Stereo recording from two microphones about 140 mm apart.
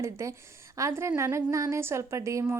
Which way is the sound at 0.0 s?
20° right (ahead or behind).